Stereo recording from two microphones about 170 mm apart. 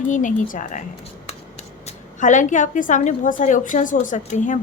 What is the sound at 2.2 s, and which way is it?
A woman's voice, 45° left (ahead or behind).